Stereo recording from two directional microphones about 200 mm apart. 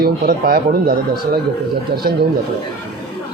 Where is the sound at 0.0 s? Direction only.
50° right (ahead or behind).